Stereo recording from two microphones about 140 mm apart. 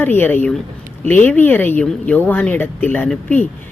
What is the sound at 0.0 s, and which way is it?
A woman's voice, 15° left (ahead or behind).